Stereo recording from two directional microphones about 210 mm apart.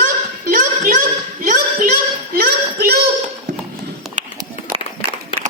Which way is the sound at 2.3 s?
45° right (ahead or behind).